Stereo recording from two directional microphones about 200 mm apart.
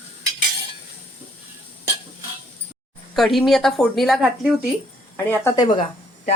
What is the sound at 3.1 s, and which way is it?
Speech, centre (ahead or behind).